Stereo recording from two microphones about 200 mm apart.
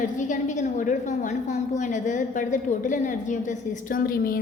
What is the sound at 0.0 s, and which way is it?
A woman's voice, 40° left (ahead or behind).